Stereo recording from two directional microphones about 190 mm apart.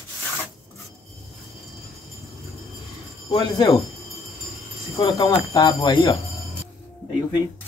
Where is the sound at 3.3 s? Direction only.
30° left (ahead or behind).